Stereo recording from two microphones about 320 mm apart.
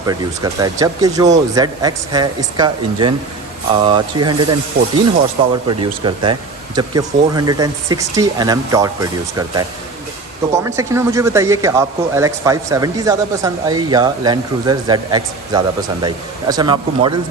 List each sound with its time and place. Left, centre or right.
0.0 s a man's voice: centre
4.8 s speech: right
5.6 s a man's voice: centre
10.5 s a man's voice: centre